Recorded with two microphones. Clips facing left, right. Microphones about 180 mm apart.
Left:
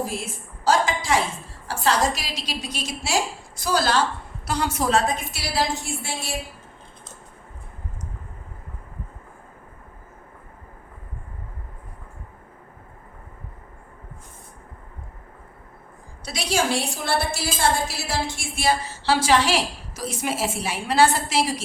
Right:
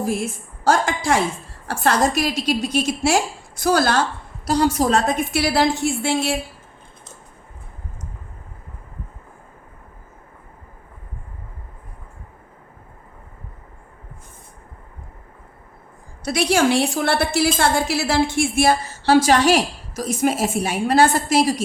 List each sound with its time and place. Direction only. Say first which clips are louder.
0.6 s a sound: right 2 dB; 55° right (ahead or behind)
1.6 s a woman's voice: right 3 dB; 55° right (ahead or behind)
4.4 s a woman's voice: right 6 dB; 35° right (ahead or behind); by 6.3 s 70° right (ahead or behind)
16.2 s a woman's voice: right 7 dB; 60° right (ahead or behind)